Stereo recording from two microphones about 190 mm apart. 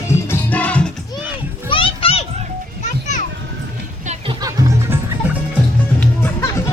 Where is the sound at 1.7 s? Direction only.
25° left (ahead or behind).